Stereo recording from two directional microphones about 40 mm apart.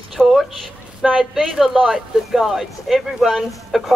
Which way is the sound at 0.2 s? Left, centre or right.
Left.